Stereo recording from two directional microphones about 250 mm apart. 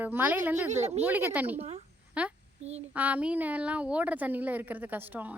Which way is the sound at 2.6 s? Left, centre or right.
Right.